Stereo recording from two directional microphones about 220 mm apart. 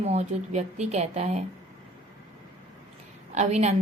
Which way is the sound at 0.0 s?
30° right (ahead or behind).